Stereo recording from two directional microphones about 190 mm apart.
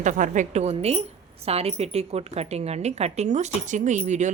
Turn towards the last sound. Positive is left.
turn(degrees=-40)  # may be behind; listen again after turning